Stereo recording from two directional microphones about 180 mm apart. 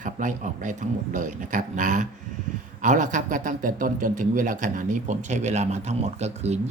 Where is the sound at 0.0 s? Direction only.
45° right (ahead or behind).